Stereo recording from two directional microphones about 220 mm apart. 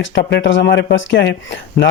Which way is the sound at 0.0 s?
55° left (ahead or behind).